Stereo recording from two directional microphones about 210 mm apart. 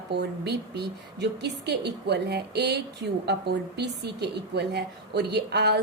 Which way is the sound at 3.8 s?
50° right (ahead or behind).